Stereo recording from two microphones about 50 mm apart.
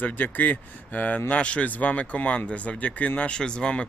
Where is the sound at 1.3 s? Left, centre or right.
Left.